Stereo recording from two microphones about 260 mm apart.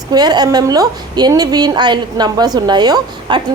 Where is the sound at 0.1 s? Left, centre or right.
Centre.